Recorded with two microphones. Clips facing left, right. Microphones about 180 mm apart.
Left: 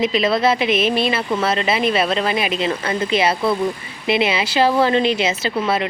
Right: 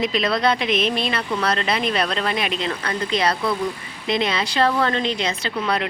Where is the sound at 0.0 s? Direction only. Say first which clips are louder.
Left 3 dB; centre (ahead or behind).